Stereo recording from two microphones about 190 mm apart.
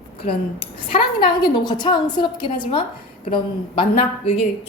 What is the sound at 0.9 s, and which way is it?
A woman's voice, 25° left (ahead or behind).